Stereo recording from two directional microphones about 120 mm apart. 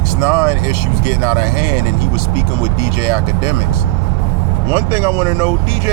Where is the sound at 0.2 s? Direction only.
15° right (ahead or behind).